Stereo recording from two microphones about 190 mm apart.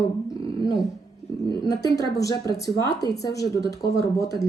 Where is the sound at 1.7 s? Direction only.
20° left (ahead or behind).